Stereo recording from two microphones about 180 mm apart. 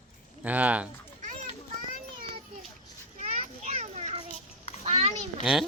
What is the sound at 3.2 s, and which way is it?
Children playing, 40° right (ahead or behind).